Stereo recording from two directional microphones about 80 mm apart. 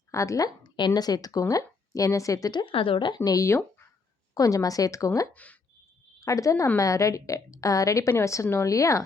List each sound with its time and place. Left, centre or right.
0.1 s a woman's voice: left
3.2 s speech: left
4.4 s speech: left
5.3 s speech: centre
6.1 s a woman's voice: left